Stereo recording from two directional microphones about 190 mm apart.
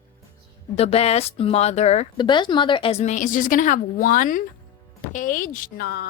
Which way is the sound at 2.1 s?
25° left (ahead or behind).